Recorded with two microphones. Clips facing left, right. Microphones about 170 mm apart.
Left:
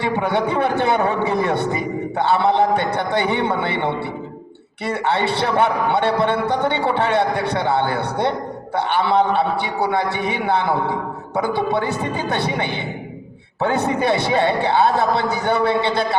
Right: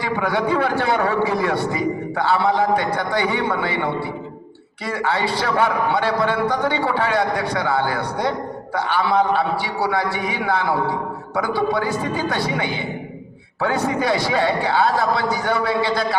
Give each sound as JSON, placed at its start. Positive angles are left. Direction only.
{"t": 0.0, "sound": "a man's voice", "side_deg": 25}
{"t": 4.9, "sound": "a man's voice", "side_deg": 25}